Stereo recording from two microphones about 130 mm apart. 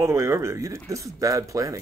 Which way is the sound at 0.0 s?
20° right (ahead or behind).